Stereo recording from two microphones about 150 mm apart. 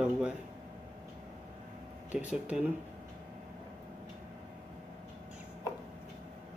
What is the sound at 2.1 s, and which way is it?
Speech, 5° right (ahead or behind).